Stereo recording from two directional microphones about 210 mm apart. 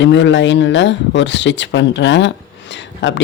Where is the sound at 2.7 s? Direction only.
60° left (ahead or behind).